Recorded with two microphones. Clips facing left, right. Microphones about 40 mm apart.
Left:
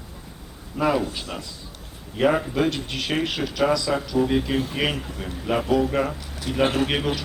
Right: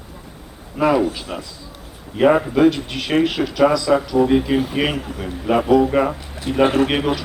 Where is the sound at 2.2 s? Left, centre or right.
Centre.